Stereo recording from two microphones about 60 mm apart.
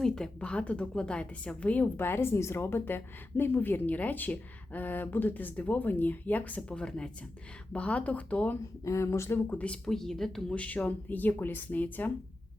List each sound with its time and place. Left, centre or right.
0.0 s a woman's voice: centre
2.0 s a woman's voice: left
6.7 s a woman's voice: centre
8.8 s speech: left
9.5 s a woman's voice: left
9.8 s speech: centre
10.5 s a woman's voice: left